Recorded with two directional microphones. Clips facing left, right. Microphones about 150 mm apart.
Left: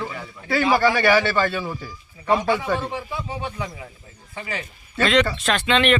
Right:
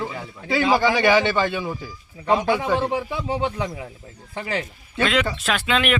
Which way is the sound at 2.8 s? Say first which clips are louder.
Right 5 dB; 65° right (ahead or behind).